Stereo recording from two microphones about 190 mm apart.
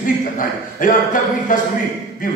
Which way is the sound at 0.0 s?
45° left (ahead or behind).